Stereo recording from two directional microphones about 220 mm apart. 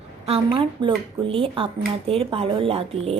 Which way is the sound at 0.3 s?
25° right (ahead or behind).